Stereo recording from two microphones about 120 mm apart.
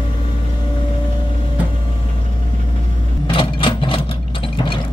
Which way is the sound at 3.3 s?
45° left (ahead or behind).